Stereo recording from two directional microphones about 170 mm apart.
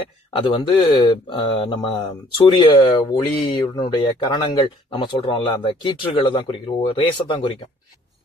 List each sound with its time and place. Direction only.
0.3 s speech: 30° left (ahead or behind)